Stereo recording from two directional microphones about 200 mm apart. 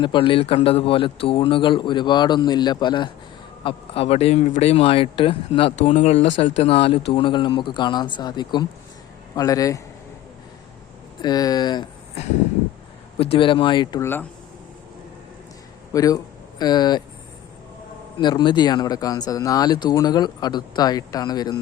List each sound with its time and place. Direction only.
0.0 s a man's voice: 25° left (ahead or behind)
11.2 s speech: 20° left (ahead or behind)
13.3 s speech: 25° left (ahead or behind)
15.9 s speech: 15° left (ahead or behind)
18.2 s speech: 20° left (ahead or behind)